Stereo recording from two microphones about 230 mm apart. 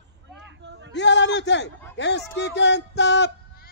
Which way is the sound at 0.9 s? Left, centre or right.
Left.